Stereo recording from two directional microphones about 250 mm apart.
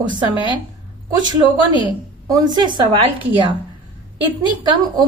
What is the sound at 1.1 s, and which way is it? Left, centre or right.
A woman's voice, centre.